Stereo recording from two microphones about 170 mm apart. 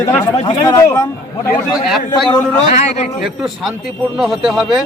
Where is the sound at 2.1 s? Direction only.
Centre (ahead or behind).